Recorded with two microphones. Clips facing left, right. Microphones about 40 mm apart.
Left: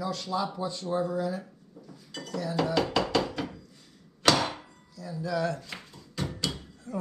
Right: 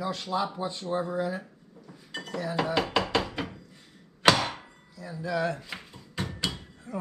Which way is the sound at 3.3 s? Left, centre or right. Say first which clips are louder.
Even; right.